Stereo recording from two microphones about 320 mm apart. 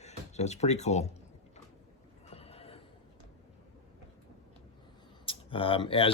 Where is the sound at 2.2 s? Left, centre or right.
Centre.